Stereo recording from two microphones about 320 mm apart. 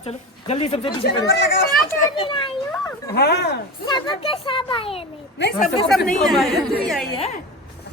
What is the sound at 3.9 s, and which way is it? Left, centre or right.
A child's voice, centre.